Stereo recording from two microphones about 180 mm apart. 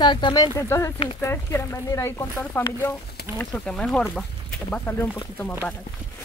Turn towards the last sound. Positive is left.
turn(degrees=10)  # may be behind; listen again after turning